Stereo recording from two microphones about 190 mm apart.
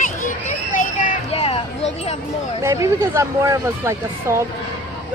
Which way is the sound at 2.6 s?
15° right (ahead or behind).